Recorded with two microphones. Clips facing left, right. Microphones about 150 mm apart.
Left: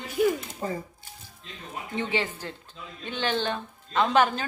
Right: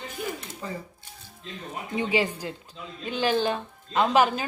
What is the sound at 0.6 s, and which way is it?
Speech, 40° left (ahead or behind).